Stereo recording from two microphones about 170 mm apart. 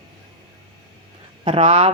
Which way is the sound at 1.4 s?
30° right (ahead or behind).